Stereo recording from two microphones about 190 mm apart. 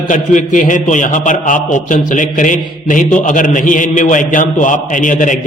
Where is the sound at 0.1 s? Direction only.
40° left (ahead or behind).